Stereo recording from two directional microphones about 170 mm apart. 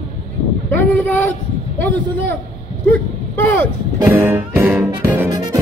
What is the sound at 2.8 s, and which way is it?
Speech, 10° left (ahead or behind).